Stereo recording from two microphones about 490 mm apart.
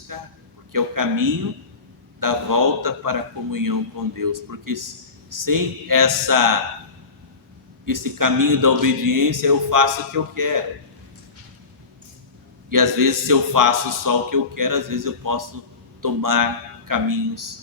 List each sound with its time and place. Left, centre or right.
0.1 s speech: right
7.9 s speech: right
12.7 s a man's voice: right